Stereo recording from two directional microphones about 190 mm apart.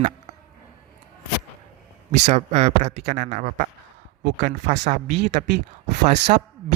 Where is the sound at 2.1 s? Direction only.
35° right (ahead or behind).